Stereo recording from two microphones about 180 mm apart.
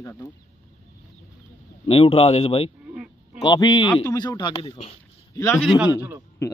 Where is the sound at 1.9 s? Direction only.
30° left (ahead or behind).